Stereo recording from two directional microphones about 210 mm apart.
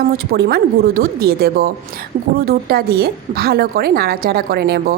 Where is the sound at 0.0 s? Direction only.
45° right (ahead or behind).